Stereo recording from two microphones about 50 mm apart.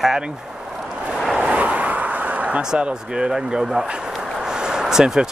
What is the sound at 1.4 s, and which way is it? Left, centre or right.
Vehicle, right.